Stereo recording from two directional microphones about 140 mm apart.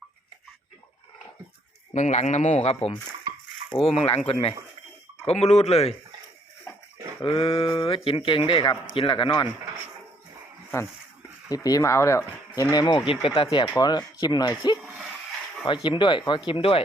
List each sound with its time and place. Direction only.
1.9 s speech: 60° left (ahead or behind)
7.2 s speech: 40° left (ahead or behind)
11.4 s speech: 25° left (ahead or behind)
14.8 s a sound: 5° right (ahead or behind)
15.6 s speech: 35° left (ahead or behind)